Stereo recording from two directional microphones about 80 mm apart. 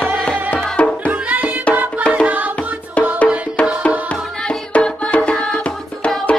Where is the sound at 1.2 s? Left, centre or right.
Right.